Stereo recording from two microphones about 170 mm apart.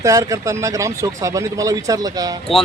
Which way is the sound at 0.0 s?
20° right (ahead or behind).